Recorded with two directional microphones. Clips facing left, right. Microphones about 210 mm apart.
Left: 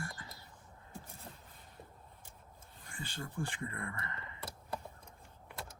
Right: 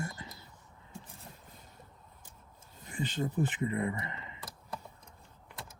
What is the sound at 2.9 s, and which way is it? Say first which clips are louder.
Speech: right 11 dB; 20° right (ahead or behind).